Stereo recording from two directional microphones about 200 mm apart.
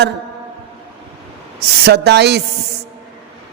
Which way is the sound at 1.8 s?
55° right (ahead or behind).